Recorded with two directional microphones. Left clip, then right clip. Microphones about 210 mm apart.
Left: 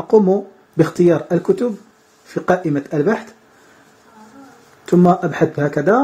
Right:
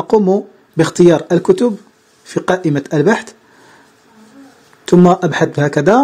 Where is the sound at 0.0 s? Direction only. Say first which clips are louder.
Right 1 dB; 30° right (ahead or behind).